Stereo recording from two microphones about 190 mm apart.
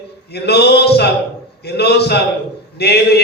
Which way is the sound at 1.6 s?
60° left (ahead or behind).